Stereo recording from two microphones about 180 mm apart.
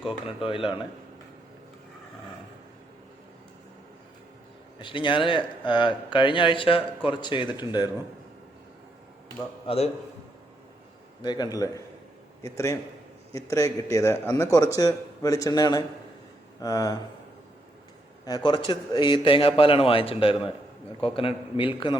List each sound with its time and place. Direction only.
0.4 s a man's voice: 30° left (ahead or behind)
4.8 s a man's voice: 25° left (ahead or behind)
9.6 s a man's voice: 35° left (ahead or behind)
11.2 s a man's voice: 25° left (ahead or behind)
18.3 s a man's voice: 25° left (ahead or behind)